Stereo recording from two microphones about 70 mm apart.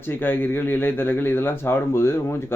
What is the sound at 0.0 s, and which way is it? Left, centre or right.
Speech, left.